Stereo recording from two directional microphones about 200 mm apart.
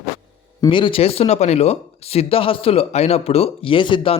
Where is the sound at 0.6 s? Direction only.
25° left (ahead or behind).